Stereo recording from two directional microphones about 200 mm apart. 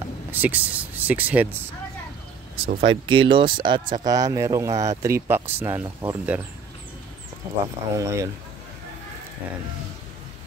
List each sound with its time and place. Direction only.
0.3 s speech: 10° right (ahead or behind)
2.8 s speech: 25° right (ahead or behind); by 6.4 s 10° right (ahead or behind)
7.6 s speech: 15° right (ahead or behind)